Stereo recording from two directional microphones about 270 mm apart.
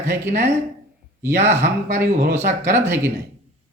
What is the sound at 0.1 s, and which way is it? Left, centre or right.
Speech, right.